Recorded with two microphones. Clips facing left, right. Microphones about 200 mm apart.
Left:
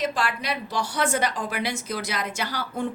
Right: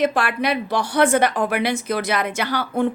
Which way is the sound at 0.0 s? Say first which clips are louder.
Right 7 dB; 60° right (ahead or behind).